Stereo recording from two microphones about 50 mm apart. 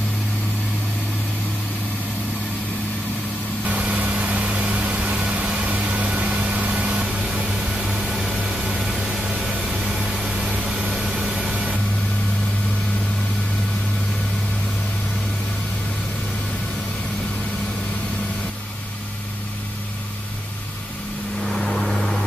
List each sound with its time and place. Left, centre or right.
3.6 s vehicle: right
7.2 s a sound: centre
9.7 s vehicle: centre
10.5 s vehicle: centre
11.0 s a sound: centre
21.5 s vehicle: centre